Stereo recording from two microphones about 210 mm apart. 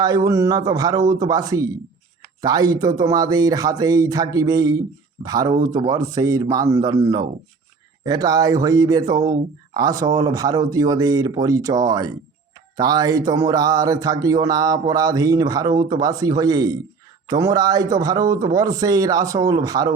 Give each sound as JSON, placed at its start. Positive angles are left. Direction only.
{"t": 0.0, "sound": "speech", "side_deg": -20}